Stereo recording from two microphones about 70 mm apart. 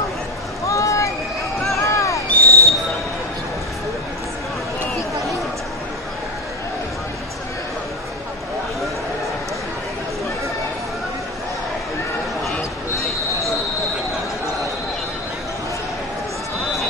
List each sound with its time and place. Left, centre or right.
0.7 s run: left
1.8 s a sound: left
2.4 s basketball bounce: right